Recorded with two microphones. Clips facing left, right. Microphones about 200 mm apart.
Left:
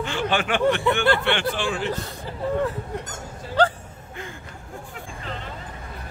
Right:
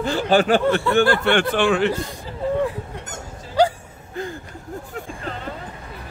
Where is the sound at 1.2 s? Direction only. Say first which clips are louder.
Right 6 dB; 50° right (ahead or behind).